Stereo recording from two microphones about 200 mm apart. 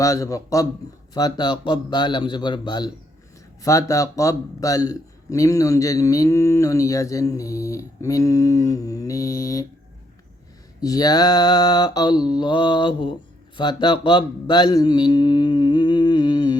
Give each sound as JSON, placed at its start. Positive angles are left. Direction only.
{"t": 0.0, "sound": "a man's voice", "side_deg": 15}
{"t": 1.1, "sound": "mantra", "side_deg": 20}
{"t": 3.6, "sound": "a man's voice", "side_deg": 15}
{"t": 10.8, "sound": "mantra", "side_deg": 20}
{"t": 13.6, "sound": "speech", "side_deg": 20}